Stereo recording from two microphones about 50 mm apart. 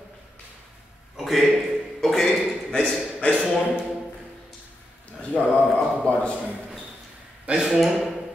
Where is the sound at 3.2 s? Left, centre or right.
Left.